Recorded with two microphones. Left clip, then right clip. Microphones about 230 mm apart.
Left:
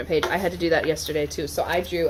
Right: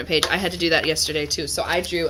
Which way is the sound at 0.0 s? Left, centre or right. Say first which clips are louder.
Right 2 dB; right.